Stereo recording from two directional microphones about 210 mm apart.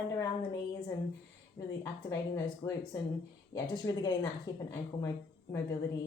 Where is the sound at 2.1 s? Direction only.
15° left (ahead or behind).